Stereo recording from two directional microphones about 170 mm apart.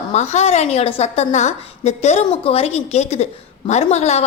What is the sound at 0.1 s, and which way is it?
A woman's voice, 40° left (ahead or behind).